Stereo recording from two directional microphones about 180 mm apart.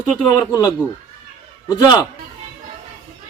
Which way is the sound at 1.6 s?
25° left (ahead or behind).